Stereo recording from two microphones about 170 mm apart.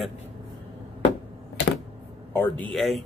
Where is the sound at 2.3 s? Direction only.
10° left (ahead or behind).